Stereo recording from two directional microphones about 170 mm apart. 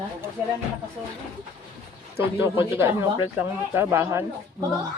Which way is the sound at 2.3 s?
15° right (ahead or behind).